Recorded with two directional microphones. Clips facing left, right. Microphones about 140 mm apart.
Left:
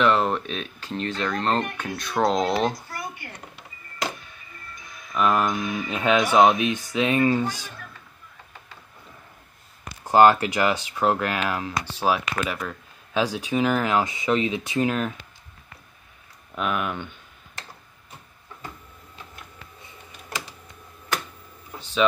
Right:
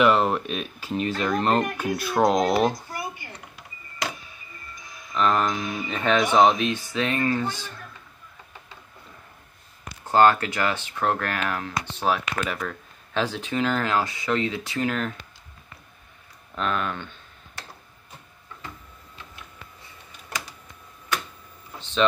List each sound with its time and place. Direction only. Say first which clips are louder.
0.0 s a child's voice: right 1 dB; 5° right (ahead or behind)
4.7 s music: even; centre (ahead or behind)
5.9 s speech: left 1 dB; 10° left (ahead or behind)
6.6 s speech: left 2 dB; 15° left (ahead or behind)
10.0 s speech: left 2 dB; 15° left (ahead or behind)
16.5 s speech: left 1 dB; 10° left (ahead or behind)
19.8 s a sound: left 2 dB; 20° left (ahead or behind)
21.7 s a sound: even; 10° left (ahead or behind)